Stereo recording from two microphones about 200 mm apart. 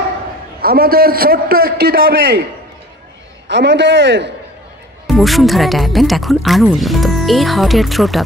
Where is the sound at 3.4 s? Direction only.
60° right (ahead or behind).